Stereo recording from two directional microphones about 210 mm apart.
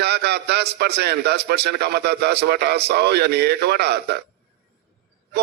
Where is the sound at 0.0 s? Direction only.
50° right (ahead or behind).